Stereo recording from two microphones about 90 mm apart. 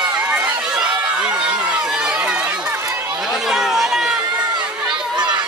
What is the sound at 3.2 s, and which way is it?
Chatter, 5° right (ahead or behind).